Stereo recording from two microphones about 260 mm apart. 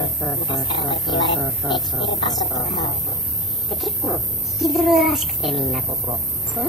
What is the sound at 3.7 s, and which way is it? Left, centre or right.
Chicken, centre.